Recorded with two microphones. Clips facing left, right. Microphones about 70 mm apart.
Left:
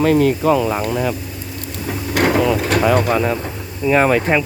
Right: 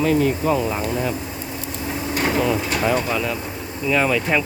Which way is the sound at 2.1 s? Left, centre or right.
Left.